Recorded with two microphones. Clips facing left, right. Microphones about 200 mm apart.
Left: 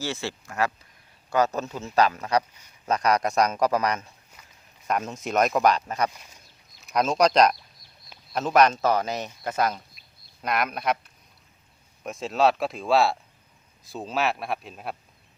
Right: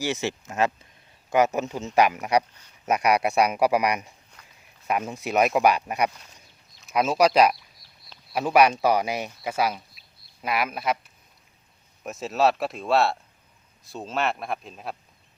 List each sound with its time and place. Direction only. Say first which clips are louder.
0.0 s speech: right 4 dB; 15° right (ahead or behind)
4.4 s a sound: even; 10° left (ahead or behind)
4.9 s speech: right 1 dB; 10° right (ahead or behind)